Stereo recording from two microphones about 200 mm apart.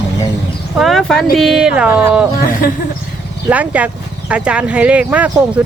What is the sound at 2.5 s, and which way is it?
Speech, 45° left (ahead or behind).